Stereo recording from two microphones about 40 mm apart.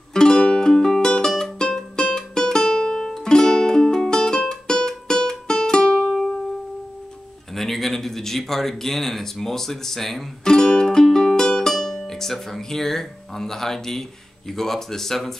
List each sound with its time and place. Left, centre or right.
0.1 s music: centre
7.5 s speech: centre
10.4 s music: centre
12.1 s speech: centre